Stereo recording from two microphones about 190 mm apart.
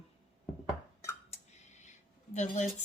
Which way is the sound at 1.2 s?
35° left (ahead or behind).